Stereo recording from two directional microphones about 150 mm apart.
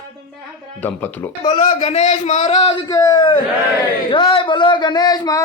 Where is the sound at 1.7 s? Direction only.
45° left (ahead or behind).